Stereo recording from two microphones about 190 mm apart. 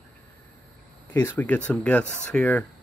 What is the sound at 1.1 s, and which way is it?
Speech, 10° left (ahead or behind).